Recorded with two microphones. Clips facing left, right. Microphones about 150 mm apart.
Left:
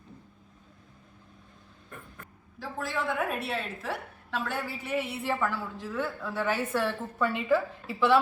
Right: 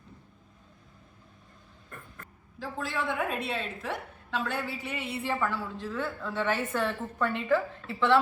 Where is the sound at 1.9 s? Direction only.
10° left (ahead or behind).